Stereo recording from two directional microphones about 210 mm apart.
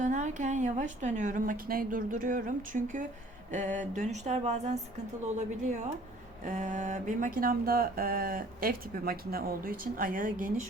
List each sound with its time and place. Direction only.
0.0 s a woman's voice: 40° right (ahead or behind)